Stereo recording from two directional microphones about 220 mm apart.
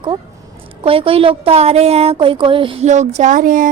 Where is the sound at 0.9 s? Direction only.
25° right (ahead or behind).